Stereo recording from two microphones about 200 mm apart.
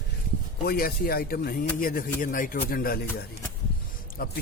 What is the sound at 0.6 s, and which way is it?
A man's voice, 50° left (ahead or behind).